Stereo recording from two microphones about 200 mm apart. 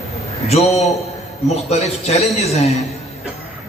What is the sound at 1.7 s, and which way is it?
Speech, 35° left (ahead or behind).